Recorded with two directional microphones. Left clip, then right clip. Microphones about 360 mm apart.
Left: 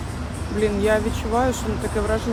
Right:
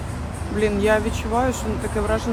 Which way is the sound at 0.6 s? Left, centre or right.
Centre.